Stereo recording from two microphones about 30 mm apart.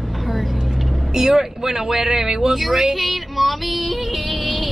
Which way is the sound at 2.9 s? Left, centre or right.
Centre.